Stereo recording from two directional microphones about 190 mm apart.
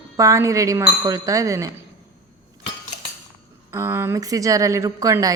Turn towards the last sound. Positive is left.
turn(degrees=-20)  # may be behind; listen again after turning